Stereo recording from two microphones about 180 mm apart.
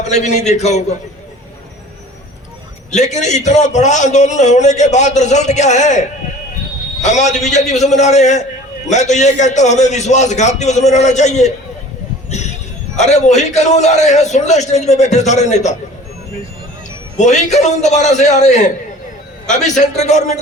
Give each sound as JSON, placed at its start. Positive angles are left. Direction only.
{"t": 0.1, "sound": "a man's voice", "side_deg": 40}
{"t": 2.9, "sound": "a man's voice", "side_deg": 40}
{"t": 13.0, "sound": "a man's voice", "side_deg": 40}
{"t": 17.2, "sound": "a man's voice", "side_deg": 40}